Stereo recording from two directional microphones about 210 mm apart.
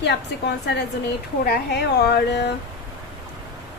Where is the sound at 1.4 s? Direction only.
50° left (ahead or behind).